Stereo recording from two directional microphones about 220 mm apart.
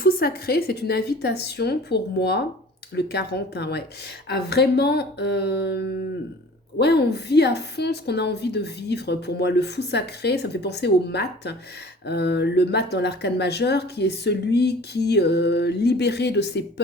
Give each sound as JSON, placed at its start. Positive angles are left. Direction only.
{"t": 0.0, "sound": "a woman's voice", "side_deg": 45}